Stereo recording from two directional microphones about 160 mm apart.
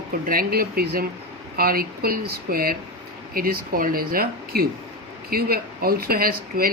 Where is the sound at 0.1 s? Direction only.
65° right (ahead or behind).